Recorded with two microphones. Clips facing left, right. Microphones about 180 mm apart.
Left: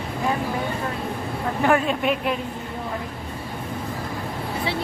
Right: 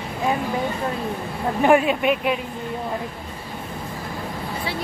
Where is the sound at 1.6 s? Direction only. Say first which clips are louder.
Right 4 dB; 15° right (ahead or behind).